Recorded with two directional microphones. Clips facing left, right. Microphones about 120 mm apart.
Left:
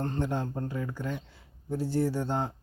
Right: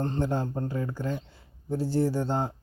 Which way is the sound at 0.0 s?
30° right (ahead or behind).